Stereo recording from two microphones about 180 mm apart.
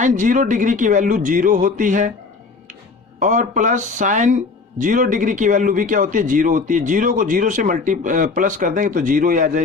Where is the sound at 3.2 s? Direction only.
45° right (ahead or behind).